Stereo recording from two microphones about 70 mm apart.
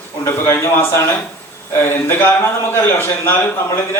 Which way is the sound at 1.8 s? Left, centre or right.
Left.